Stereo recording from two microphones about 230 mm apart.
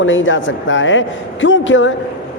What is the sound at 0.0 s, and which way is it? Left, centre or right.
A man's voice, left.